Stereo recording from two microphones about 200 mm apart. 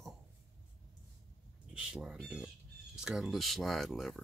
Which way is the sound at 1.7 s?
5° right (ahead or behind).